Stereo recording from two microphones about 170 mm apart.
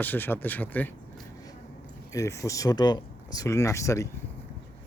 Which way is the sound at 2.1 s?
20° left (ahead or behind).